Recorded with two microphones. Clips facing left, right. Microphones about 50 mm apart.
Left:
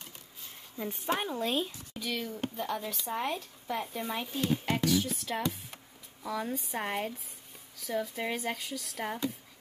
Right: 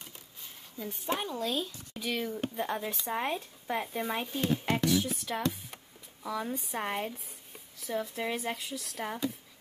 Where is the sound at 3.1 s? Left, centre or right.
Centre.